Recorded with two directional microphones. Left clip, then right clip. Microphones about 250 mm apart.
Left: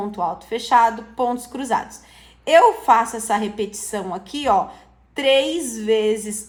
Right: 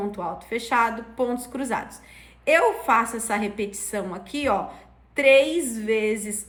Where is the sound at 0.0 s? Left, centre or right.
Left.